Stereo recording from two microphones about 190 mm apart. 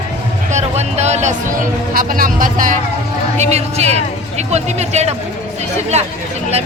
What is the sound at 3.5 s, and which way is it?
Speech, 35° right (ahead or behind).